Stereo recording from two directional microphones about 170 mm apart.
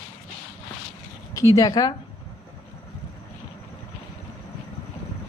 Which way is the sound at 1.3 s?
20° left (ahead or behind).